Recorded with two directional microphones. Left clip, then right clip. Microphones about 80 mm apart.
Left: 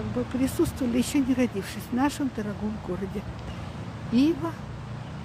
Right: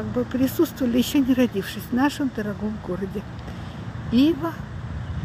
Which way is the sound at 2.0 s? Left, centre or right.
Centre.